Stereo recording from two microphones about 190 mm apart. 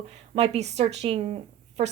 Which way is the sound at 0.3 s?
35° right (ahead or behind).